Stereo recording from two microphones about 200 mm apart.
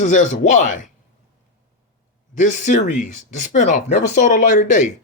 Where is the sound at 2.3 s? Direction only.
40° left (ahead or behind).